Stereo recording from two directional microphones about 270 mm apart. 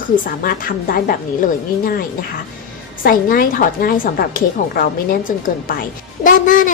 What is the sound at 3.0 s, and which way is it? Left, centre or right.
Speech, left.